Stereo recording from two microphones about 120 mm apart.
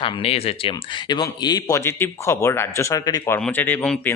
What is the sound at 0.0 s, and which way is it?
Speech, 55° left (ahead or behind).